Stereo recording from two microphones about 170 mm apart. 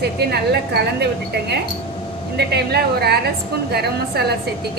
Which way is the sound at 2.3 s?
75° right (ahead or behind).